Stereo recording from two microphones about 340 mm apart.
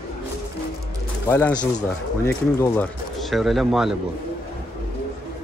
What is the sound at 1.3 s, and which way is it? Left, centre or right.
Speech, centre.